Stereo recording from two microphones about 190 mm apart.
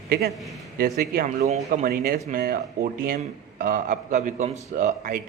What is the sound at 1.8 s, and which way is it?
A man's voice, 50° right (ahead or behind).